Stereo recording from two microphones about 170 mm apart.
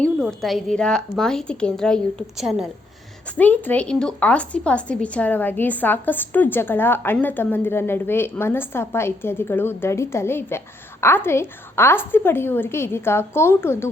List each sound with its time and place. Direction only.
0.0 s a woman's voice: centre (ahead or behind)
3.3 s a woman's voice: 10° left (ahead or behind)